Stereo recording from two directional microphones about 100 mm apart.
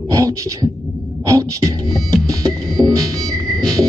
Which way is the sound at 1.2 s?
35° right (ahead or behind).